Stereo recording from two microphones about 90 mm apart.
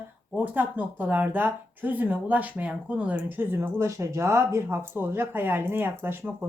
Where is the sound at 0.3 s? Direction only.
20° right (ahead or behind).